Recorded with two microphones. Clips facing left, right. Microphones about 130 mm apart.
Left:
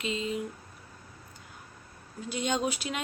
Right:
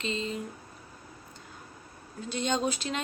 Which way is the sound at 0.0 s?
10° left (ahead or behind).